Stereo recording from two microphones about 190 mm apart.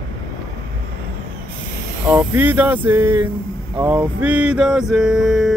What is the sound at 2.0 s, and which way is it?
Speech, 10° right (ahead or behind).